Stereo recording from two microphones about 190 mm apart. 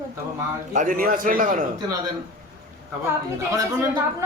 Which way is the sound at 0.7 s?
40° right (ahead or behind).